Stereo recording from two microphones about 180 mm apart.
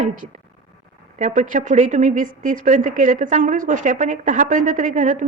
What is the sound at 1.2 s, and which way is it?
A woman's voice, 40° right (ahead or behind).